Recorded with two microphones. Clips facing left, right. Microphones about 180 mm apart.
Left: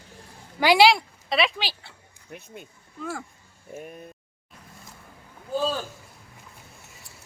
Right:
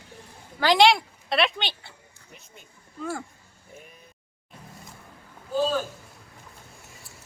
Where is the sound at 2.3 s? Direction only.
60° left (ahead or behind).